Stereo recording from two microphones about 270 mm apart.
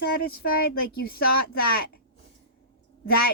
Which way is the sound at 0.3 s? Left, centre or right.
Left.